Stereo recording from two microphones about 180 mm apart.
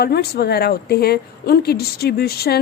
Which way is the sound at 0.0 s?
60° left (ahead or behind).